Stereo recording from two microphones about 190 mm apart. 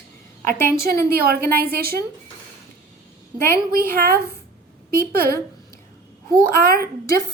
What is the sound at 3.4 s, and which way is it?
Speech, 15° left (ahead or behind).